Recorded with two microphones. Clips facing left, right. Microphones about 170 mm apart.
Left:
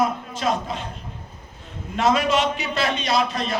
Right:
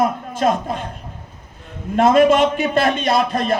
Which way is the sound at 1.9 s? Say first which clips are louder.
Right 7 dB; 50° right (ahead or behind).